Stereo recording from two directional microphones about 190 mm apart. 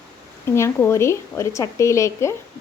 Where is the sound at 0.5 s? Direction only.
15° left (ahead or behind).